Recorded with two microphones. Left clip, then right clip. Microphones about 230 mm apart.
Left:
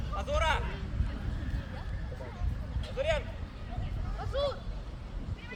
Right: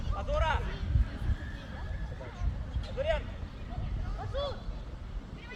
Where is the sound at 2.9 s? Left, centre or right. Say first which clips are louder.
Left 1 dB; left.